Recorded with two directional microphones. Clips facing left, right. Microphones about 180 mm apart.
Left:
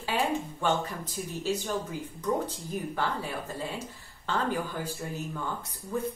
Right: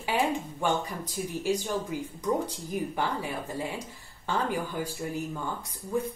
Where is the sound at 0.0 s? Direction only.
15° right (ahead or behind).